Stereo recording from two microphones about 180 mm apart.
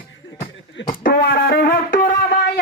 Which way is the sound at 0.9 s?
55° left (ahead or behind).